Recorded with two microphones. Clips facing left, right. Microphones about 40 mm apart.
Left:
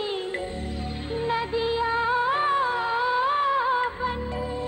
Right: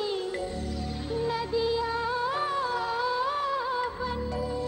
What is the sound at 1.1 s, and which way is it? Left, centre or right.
Music, left.